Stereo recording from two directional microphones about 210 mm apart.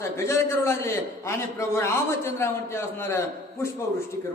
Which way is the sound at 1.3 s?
10° left (ahead or behind).